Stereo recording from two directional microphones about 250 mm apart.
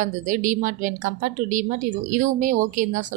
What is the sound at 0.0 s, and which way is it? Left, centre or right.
Speech, right.